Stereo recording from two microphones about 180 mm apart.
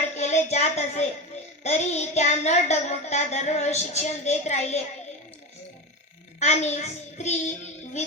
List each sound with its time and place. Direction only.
0.1 s a sound: 40° left (ahead or behind)
0.5 s a woman's voice: 40° left (ahead or behind)
6.4 s a child's voice: 40° left (ahead or behind)